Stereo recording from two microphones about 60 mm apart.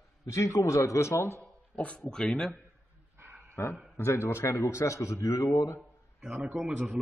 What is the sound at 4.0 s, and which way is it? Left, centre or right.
Speech, left.